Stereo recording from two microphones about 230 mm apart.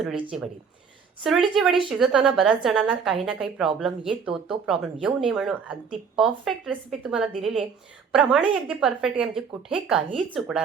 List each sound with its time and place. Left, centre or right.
0.3 s a woman's voice: centre